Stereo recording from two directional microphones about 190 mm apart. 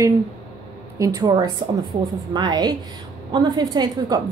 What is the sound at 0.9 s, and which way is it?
A woman's voice, 20° right (ahead or behind).